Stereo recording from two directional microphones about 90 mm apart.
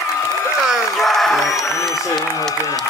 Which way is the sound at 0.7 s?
Centre (ahead or behind).